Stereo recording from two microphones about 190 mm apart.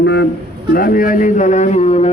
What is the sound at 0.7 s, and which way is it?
A man's voice, 50° left (ahead or behind).